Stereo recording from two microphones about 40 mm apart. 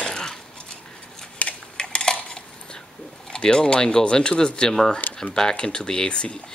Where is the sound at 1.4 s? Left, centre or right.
Left.